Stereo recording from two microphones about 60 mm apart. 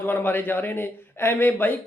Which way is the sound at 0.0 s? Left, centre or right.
Left.